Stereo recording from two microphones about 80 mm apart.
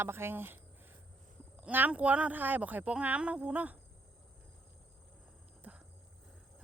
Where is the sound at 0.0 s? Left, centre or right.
Right.